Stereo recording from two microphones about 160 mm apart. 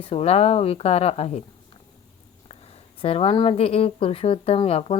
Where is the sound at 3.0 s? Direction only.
40° left (ahead or behind).